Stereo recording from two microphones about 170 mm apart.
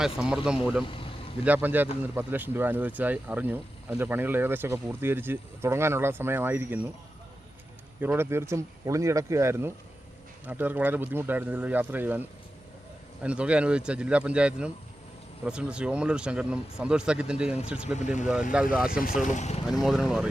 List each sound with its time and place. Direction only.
0.4 s speech: 5° right (ahead or behind)
8.0 s speech: 15° right (ahead or behind)
13.2 s speech: 5° right (ahead or behind)
17.9 s speech: 45° left (ahead or behind)
18.5 s speech: 5° right (ahead or behind)
19.2 s speech: 45° left (ahead or behind)
19.6 s speech: centre (ahead or behind)